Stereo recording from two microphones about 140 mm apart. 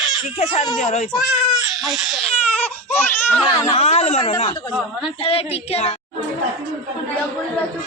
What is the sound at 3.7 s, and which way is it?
Child singing, 50° left (ahead or behind).